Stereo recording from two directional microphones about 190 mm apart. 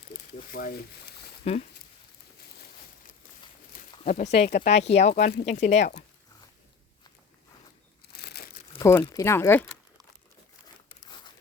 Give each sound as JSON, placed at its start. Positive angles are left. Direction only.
{"t": 0.5, "sound": "speech", "side_deg": 50}
{"t": 1.5, "sound": "speech", "side_deg": 30}
{"t": 4.0, "sound": "speech", "side_deg": 35}
{"t": 8.1, "sound": "crumpling", "side_deg": 55}
{"t": 8.8, "sound": "speech", "side_deg": 15}